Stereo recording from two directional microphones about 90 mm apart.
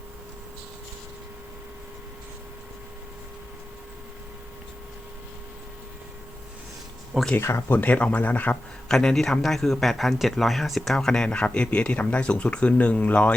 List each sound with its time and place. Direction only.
7.3 s speech: 25° left (ahead or behind)
8.9 s speech: 5° left (ahead or behind)